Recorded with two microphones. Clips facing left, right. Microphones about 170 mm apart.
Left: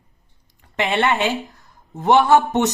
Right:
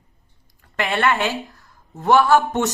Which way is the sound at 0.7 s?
20° left (ahead or behind).